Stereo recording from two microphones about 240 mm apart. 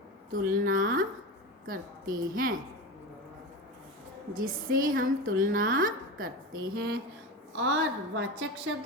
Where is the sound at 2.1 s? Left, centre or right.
Right.